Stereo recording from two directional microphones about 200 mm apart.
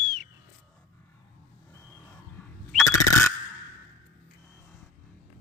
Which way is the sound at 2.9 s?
15° left (ahead or behind).